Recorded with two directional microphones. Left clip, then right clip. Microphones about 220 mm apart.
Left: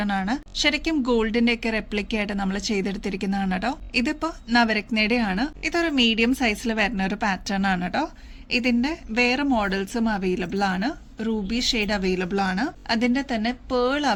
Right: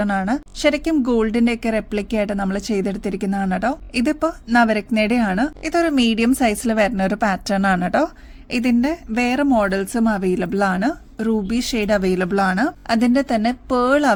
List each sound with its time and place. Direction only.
0.0 s speech: 30° right (ahead or behind)